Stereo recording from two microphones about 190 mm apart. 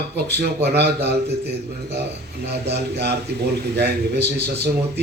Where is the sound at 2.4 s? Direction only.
60° right (ahead or behind).